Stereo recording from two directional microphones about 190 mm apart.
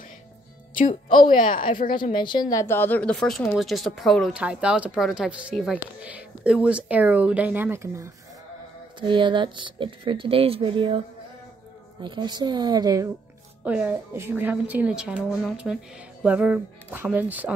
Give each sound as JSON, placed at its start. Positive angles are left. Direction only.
{"t": 0.7, "sound": "a woman's voice", "side_deg": 45}
{"t": 2.1, "sound": "a woman's voice", "side_deg": 25}
{"t": 9.0, "sound": "speech", "side_deg": -25}
{"t": 12.0, "sound": "speech", "side_deg": -25}
{"t": 13.7, "sound": "a woman's voice", "side_deg": -10}